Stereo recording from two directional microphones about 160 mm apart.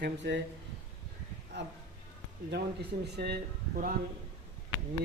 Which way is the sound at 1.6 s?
90° right.